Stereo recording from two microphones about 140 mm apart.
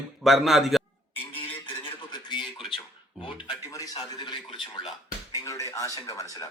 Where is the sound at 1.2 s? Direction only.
40° left (ahead or behind).